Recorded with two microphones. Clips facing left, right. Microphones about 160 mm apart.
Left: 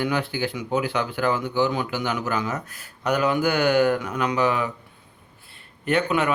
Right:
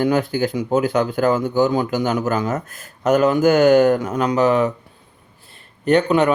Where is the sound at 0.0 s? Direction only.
45° right (ahead or behind).